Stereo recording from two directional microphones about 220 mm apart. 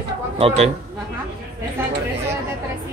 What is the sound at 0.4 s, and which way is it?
Speech, 25° right (ahead or behind).